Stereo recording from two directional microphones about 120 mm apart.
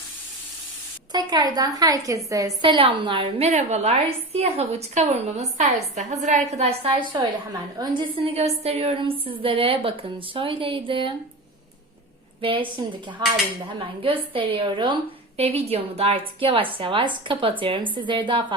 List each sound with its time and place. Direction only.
1.1 s a woman's voice: 35° right (ahead or behind)
2.6 s a woman's voice: 45° right (ahead or behind)
12.4 s a woman's voice: 45° right (ahead or behind)
13.2 s dishes: 40° right (ahead or behind)
13.7 s a woman's voice: 45° right (ahead or behind)
15.4 s a woman's voice: 55° right (ahead or behind)